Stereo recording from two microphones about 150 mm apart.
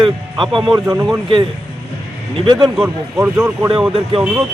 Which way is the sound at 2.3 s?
35° right (ahead or behind).